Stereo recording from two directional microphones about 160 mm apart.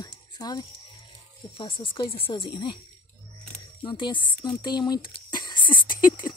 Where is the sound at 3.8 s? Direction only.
30° left (ahead or behind).